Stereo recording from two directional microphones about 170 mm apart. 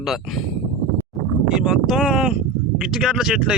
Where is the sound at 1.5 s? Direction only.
5° right (ahead or behind).